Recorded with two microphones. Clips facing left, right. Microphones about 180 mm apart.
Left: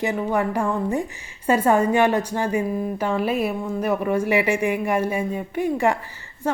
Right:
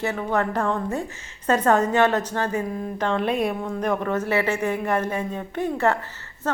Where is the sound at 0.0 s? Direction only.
15° left (ahead or behind).